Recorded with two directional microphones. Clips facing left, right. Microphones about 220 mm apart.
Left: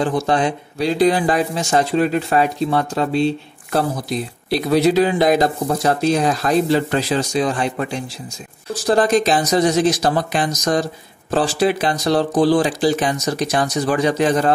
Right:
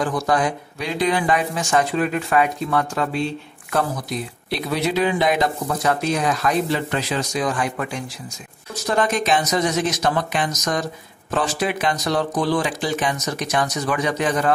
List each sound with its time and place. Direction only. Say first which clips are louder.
0.0 s speech: left 3 dB; 25° left (ahead or behind)